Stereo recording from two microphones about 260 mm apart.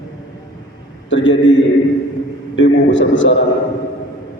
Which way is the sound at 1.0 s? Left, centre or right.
Left.